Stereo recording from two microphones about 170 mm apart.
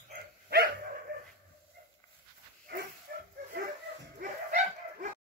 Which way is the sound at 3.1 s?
65° right (ahead or behind).